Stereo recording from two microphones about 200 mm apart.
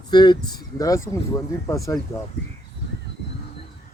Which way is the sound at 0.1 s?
20° left (ahead or behind).